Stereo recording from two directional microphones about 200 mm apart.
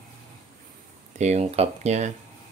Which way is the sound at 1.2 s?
35° right (ahead or behind).